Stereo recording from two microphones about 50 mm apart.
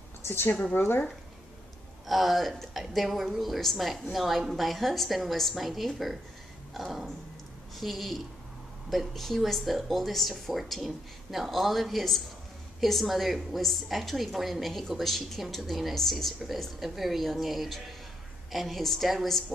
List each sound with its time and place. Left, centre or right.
0.2 s a woman's voice: left
2.0 s a woman's voice: centre
6.7 s a sound: centre
7.7 s a woman's voice: centre